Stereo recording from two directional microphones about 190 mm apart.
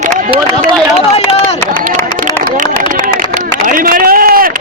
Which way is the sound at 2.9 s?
45° right (ahead or behind).